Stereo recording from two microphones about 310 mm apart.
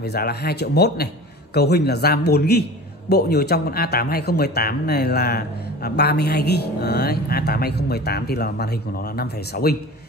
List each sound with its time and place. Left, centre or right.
0.0 s speech: left